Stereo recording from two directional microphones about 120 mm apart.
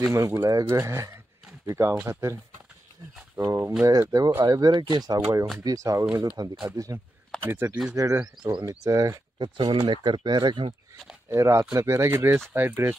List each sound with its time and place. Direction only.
0.0 s speech: 25° right (ahead or behind)
3.3 s speech: 25° right (ahead or behind)
7.4 s speech: 20° right (ahead or behind)
8.4 s speech: 40° right (ahead or behind)
11.2 s speech: 25° right (ahead or behind)